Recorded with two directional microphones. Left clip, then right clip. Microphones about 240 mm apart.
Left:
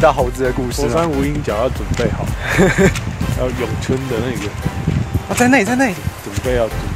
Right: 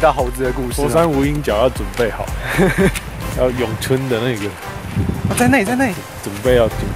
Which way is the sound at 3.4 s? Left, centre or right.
Right.